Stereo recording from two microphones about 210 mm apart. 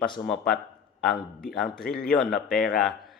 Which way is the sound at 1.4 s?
Centre (ahead or behind).